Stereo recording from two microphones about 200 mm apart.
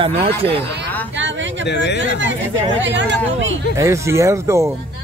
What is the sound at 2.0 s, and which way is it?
Speech, 70° right (ahead or behind).